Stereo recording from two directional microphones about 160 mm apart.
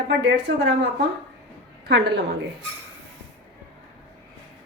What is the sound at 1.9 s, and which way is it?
Speech, 90° right.